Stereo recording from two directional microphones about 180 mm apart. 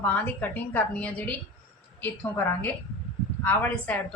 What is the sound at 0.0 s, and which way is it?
A woman's voice, 10° left (ahead or behind).